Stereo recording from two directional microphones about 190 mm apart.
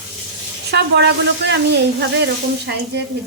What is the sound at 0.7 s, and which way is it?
Sizzle, 60° right (ahead or behind).